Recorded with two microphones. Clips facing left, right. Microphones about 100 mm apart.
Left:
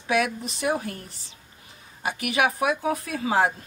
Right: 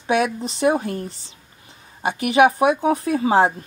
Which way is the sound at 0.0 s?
30° right (ahead or behind).